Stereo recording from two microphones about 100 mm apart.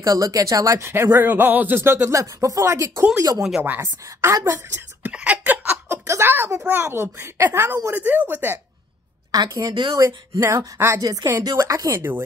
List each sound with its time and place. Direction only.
0.0 s a woman's voice: 35° right (ahead or behind)
5.0 s a sound: 15° right (ahead or behind)
6.6 s speech: 20° right (ahead or behind)
9.3 s a woman's voice: 40° right (ahead or behind)
11.0 s speech: 40° right (ahead or behind); by 12.2 s 25° right (ahead or behind)